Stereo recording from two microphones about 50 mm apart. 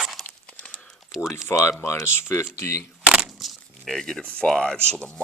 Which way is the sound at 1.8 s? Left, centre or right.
Left.